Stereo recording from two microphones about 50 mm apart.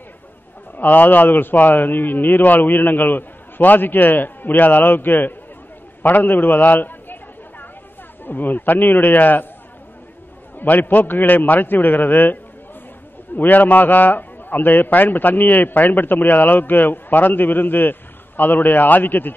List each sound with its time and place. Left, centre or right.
0.7 s a man's voice: left
6.0 s a sound: left
8.2 s a man's voice: left
10.6 s a man's voice: left